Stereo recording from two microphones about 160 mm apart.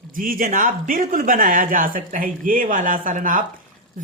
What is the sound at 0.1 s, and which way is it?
Speech, 60° right (ahead or behind).